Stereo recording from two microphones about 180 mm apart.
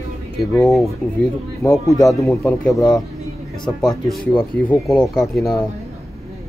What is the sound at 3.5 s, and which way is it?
Speech, 5° left (ahead or behind).